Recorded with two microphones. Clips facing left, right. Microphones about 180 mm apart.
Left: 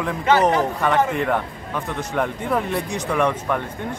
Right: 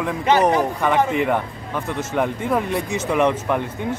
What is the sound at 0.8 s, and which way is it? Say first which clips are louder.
Speech: right 1 dB; 5° right (ahead or behind).